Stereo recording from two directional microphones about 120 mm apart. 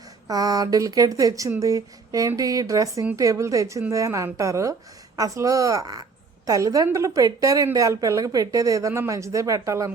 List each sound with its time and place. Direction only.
0.3 s a woman's voice: 30° right (ahead or behind)